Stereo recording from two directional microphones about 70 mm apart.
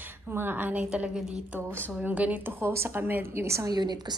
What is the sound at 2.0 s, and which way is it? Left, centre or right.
A woman's voice, right.